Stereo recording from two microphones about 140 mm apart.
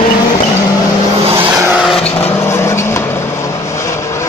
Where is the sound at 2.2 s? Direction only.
15° left (ahead or behind).